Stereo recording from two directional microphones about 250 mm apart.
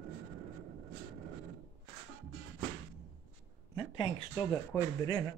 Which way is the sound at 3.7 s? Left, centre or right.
Centre.